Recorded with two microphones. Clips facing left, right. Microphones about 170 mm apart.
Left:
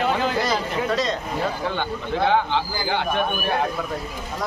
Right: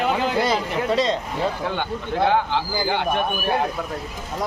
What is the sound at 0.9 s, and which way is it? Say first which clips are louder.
Speech: right 5 dB; 25° right (ahead or behind).